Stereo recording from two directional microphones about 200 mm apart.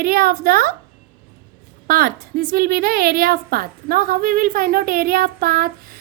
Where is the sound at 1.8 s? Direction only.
50° right (ahead or behind).